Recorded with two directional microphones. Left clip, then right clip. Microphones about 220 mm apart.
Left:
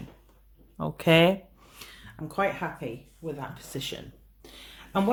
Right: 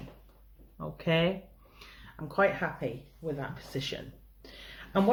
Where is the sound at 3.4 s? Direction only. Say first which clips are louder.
Left 1 dB; 30° left (ahead or behind).